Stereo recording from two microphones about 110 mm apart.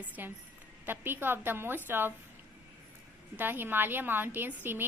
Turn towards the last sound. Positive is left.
turn(degrees=-20)  # may be behind; listen again after turning